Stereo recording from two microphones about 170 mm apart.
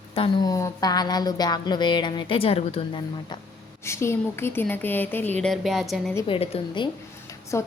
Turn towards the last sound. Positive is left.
turn(degrees=15)  # may be behind; listen again after turning